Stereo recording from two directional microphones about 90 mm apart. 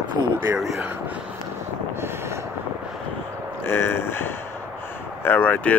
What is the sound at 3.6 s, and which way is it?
Speech, 25° left (ahead or behind).